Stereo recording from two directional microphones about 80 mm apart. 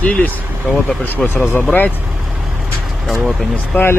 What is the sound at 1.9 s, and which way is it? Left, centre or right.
Vehicle, centre.